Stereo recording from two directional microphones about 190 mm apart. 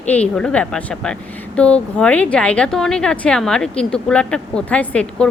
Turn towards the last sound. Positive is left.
turn(degrees=5)  # may be behind; listen again after turning